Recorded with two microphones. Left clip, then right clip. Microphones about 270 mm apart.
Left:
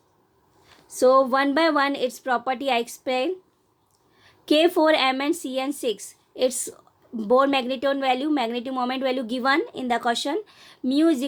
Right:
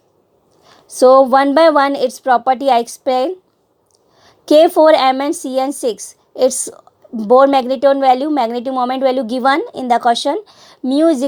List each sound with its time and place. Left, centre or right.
0.9 s speech: right